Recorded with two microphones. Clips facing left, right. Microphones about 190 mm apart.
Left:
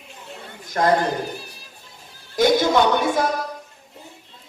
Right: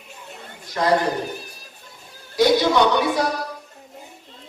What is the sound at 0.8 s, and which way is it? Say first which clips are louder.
Speech: left 2 dB; 50° left (ahead or behind).